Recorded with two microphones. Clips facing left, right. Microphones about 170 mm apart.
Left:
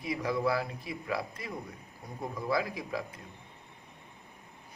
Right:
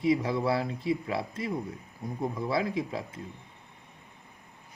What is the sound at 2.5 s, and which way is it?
Speech, 25° right (ahead or behind).